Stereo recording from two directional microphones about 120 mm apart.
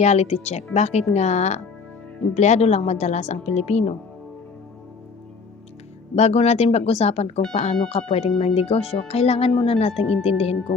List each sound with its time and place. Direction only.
0.0 s speech: 65° left (ahead or behind)
6.1 s a woman's voice: 65° left (ahead or behind)